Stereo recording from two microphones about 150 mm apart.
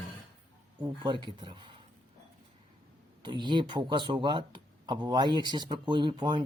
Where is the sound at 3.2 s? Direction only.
30° right (ahead or behind).